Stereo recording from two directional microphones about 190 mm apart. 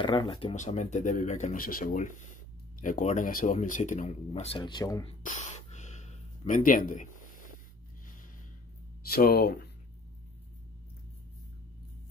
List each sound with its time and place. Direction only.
0.0 s speech: 25° left (ahead or behind)
5.2 s gasp: 40° left (ahead or behind)
9.1 s speech: 55° left (ahead or behind)